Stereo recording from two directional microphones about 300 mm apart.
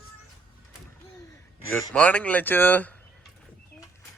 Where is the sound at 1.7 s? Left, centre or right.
Centre.